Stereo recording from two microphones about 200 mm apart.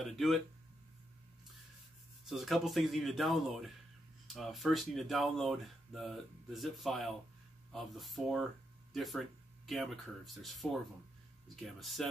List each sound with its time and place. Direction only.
0.0 s speech: centre (ahead or behind)
2.2 s speech: centre (ahead or behind)